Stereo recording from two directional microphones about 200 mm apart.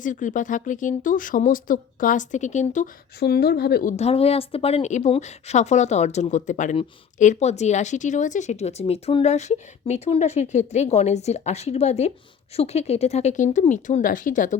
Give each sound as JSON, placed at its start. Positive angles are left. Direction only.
{"t": 0.0, "sound": "speech", "side_deg": 40}
{"t": 3.2, "sound": "speech", "side_deg": 50}
{"t": 3.9, "sound": "speech", "side_deg": 30}